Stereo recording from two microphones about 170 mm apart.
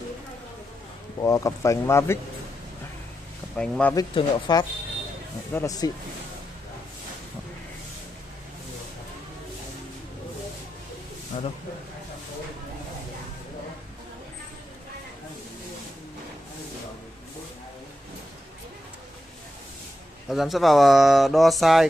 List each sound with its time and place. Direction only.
1.2 s speech: 20° left (ahead or behind)
3.5 s speech: 5° left (ahead or behind)
3.9 s speech: 25° left (ahead or behind)
20.2 s speech: centre (ahead or behind)